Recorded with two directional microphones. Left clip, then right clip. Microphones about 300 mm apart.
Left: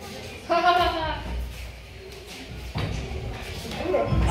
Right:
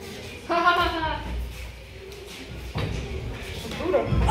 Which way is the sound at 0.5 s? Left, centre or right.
Centre.